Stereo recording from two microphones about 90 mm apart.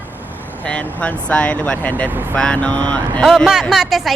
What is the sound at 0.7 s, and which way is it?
Speech, 15° left (ahead or behind).